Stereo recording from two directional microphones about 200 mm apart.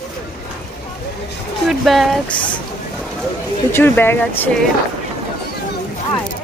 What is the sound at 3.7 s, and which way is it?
Speech, 10° left (ahead or behind).